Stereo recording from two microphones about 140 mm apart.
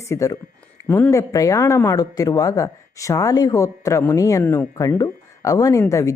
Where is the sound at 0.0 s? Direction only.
20° left (ahead or behind).